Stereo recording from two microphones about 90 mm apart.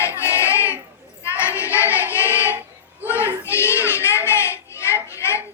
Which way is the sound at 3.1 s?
30° left (ahead or behind).